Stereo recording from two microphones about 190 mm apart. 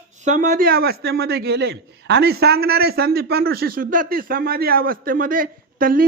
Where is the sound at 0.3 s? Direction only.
40° right (ahead or behind).